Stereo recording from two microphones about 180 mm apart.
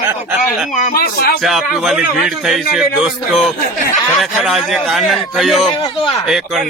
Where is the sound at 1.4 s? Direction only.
Centre (ahead or behind).